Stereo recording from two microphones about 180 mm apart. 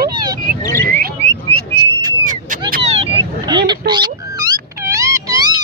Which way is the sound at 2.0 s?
50° right (ahead or behind).